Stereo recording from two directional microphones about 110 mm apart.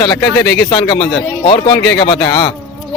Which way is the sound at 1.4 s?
50° left (ahead or behind).